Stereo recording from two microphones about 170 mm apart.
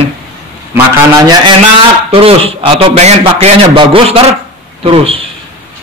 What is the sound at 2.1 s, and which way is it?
A man's voice, 30° right (ahead or behind).